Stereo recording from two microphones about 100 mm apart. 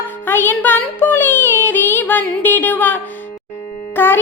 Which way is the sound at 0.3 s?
20° left (ahead or behind).